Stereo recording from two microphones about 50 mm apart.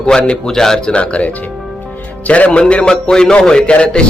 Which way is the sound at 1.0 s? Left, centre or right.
Left.